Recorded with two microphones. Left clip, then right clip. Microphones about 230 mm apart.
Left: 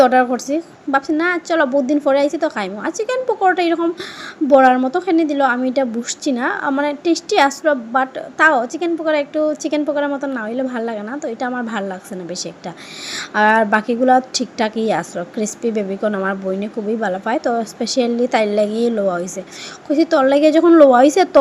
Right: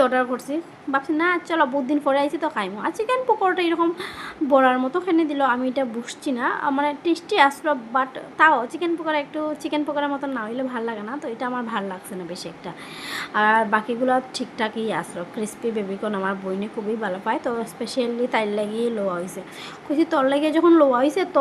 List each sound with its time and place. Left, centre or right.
0.0 s a woman's voice: centre